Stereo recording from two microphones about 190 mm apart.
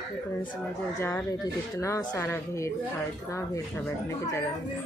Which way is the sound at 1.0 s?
15° left (ahead or behind).